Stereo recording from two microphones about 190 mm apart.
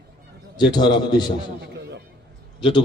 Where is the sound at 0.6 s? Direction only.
25° left (ahead or behind).